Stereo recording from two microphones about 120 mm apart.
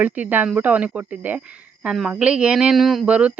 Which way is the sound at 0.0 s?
15° right (ahead or behind).